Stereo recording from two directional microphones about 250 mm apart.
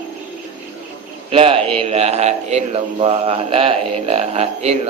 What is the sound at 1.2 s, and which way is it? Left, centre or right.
A man's voice, right.